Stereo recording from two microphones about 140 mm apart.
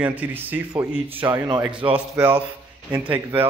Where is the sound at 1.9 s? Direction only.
10° right (ahead or behind).